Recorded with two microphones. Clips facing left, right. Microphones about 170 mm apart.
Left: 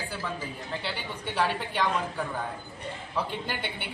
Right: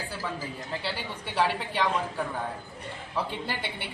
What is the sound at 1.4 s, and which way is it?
Speech, centre (ahead or behind).